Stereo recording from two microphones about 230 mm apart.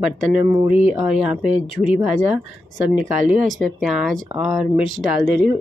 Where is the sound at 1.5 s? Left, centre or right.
Left.